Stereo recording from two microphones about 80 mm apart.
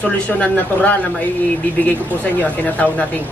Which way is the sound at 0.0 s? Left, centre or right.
Centre.